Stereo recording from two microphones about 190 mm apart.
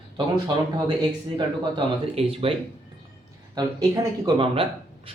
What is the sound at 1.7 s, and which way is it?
Speech, 30° right (ahead or behind).